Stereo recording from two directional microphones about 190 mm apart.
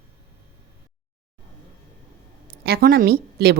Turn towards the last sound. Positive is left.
turn(degrees=-55)  # may be behind; listen again after turning